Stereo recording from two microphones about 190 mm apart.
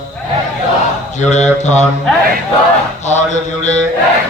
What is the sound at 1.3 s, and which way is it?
Speech, 40° left (ahead or behind).